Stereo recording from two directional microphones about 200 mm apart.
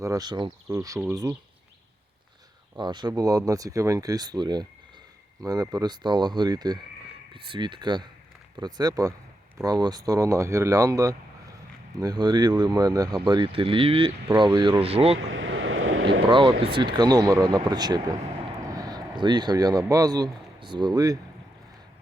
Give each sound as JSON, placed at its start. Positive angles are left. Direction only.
{"t": 0.0, "sound": "speech", "side_deg": -20}
{"t": 2.7, "sound": "speech", "side_deg": -20}
{"t": 15.3, "sound": "vehicle", "side_deg": -75}
{"t": 16.3, "sound": "speech", "side_deg": -25}